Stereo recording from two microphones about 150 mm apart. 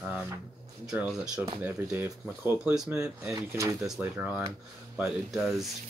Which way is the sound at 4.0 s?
10° right (ahead or behind).